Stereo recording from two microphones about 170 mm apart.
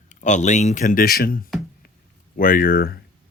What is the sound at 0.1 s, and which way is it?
Speech, 45° left (ahead or behind).